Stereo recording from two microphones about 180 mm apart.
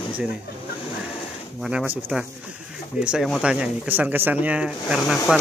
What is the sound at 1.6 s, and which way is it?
Speech, 5° right (ahead or behind).